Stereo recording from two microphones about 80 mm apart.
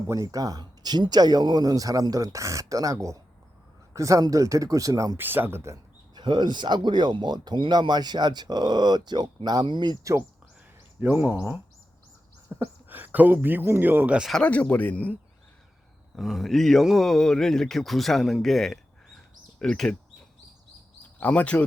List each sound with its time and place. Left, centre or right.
0.1 s speech: right
5.1 s speech: right
6.1 s speech: right
10.0 s speech: right
11.0 s speech: right
12.5 s a sound: right
12.9 s speech: right
14.3 s speech: centre
16.1 s a man's voice: centre
21.2 s speech: centre